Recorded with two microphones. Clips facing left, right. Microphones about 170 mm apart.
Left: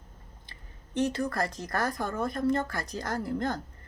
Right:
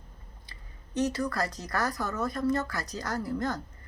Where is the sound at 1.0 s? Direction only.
50° left (ahead or behind).